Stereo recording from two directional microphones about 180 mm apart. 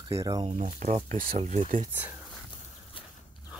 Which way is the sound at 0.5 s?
45° right (ahead or behind).